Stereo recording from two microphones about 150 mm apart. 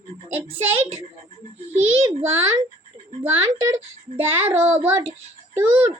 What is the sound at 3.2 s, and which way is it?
A child's voice, 15° right (ahead or behind).